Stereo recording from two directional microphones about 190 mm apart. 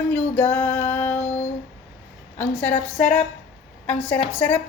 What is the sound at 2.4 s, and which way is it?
Speech, 10° left (ahead or behind).